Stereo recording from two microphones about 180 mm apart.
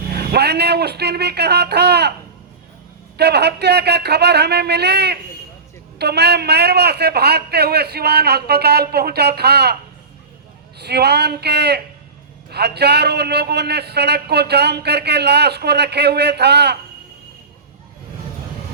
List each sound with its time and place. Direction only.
0.1 s speech: 60° right (ahead or behind)
3.2 s a man's voice: 65° right (ahead or behind)
10.8 s a man's voice: 65° right (ahead or behind)